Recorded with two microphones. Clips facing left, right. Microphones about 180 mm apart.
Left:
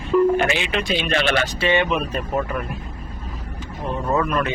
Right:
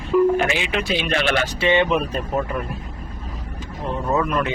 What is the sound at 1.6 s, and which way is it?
Speech, 20° right (ahead or behind).